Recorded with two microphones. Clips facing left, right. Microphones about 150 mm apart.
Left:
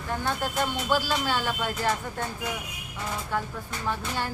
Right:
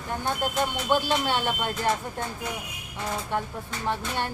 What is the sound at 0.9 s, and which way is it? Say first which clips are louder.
Speech: right 3 dB; 25° right (ahead or behind).